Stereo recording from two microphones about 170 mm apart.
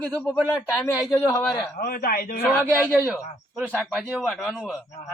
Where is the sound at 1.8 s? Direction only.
60° left (ahead or behind).